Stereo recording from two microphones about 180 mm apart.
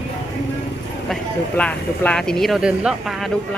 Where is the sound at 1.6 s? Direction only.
5° left (ahead or behind).